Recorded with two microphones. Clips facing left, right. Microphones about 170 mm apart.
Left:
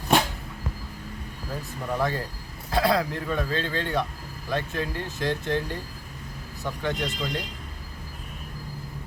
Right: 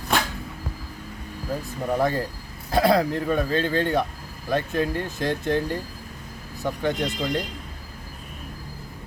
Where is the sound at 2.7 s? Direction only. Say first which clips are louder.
Right 4 dB; 40° right (ahead or behind).